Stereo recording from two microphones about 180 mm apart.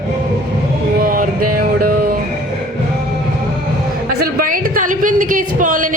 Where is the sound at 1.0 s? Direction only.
50° right (ahead or behind).